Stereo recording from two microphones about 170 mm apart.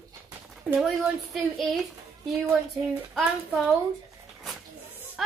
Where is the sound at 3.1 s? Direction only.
Centre (ahead or behind).